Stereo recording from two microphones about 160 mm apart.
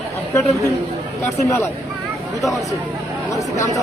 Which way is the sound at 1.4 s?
20° left (ahead or behind).